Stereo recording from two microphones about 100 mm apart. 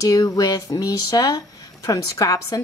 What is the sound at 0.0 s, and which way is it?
A woman's voice, 40° left (ahead or behind).